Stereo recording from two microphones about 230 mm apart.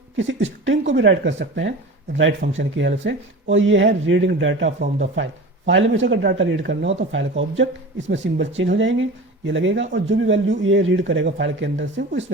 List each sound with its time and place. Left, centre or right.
0.2 s speech: right